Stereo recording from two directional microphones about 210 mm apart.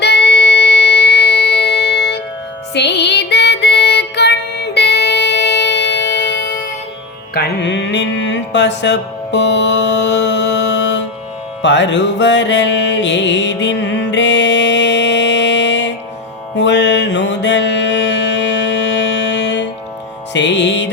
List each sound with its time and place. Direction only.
0.0 s music: 50° left (ahead or behind)
7.3 s mantra: 50° left (ahead or behind)
11.6 s music: 55° left (ahead or behind)